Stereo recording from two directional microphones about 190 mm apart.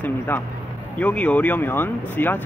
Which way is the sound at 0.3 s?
10° left (ahead or behind).